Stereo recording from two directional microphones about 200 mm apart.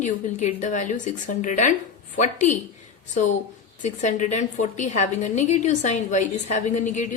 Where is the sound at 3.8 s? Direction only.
35° left (ahead or behind).